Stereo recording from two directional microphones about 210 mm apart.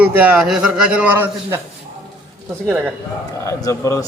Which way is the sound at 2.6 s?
10° right (ahead or behind).